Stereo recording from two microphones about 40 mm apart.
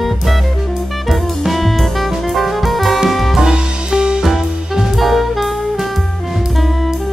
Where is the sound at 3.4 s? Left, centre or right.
Centre.